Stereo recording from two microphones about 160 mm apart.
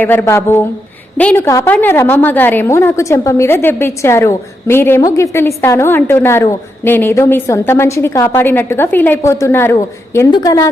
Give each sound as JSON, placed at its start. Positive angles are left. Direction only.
{"t": 0.0, "sound": "a woman's voice", "side_deg": 10}